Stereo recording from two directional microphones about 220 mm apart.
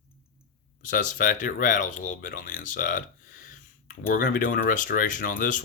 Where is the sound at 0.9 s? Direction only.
40° left (ahead or behind).